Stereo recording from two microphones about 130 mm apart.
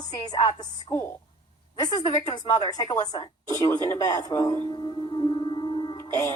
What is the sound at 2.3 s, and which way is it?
A woman's voice, 30° left (ahead or behind).